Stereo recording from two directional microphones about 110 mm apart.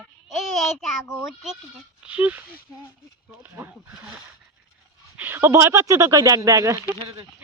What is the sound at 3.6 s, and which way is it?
Speech, 15° right (ahead or behind).